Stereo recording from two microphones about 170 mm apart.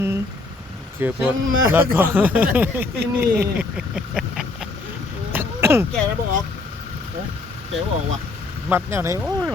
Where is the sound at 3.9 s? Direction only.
5° right (ahead or behind).